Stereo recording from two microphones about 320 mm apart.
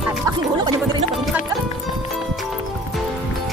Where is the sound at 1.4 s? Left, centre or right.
Centre.